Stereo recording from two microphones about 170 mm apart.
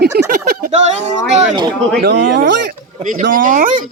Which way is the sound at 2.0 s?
90° right.